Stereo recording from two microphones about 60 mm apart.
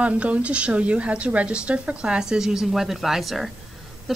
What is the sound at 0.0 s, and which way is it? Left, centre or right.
A woman's voice, right.